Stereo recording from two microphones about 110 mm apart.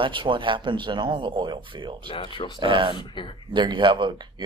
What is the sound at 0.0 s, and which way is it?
Speech, 50° right (ahead or behind).